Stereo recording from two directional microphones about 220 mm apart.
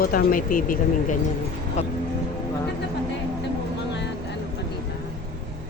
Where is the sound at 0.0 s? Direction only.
40° left (ahead or behind).